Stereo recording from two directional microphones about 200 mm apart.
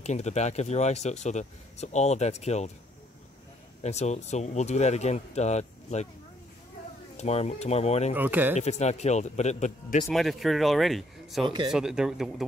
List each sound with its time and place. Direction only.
0.0 s speech: 35° left (ahead or behind)
3.8 s speech: 35° left (ahead or behind)
7.2 s speech: 35° left (ahead or behind)
8.1 s speech: 10° right (ahead or behind)
8.5 s speech: 35° left (ahead or behind)
10.0 s speech: centre (ahead or behind)
11.4 s speech: 25° right (ahead or behind)
11.7 s speech: 5° right (ahead or behind)